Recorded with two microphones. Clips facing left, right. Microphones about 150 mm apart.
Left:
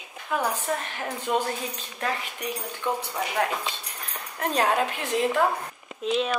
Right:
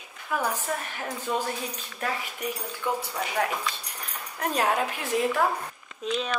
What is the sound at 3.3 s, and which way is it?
Speech, 20° left (ahead or behind).